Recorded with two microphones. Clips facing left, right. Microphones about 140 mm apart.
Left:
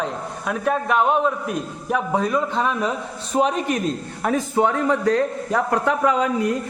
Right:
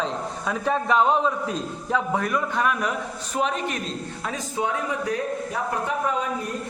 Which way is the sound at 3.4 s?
40° left (ahead or behind).